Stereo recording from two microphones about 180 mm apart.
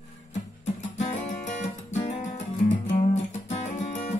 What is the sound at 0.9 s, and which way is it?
Music, 40° left (ahead or behind).